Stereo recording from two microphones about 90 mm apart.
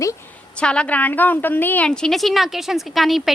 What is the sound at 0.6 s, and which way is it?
A woman's voice, 10° left (ahead or behind).